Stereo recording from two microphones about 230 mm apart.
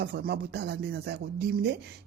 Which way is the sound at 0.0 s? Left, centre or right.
Right.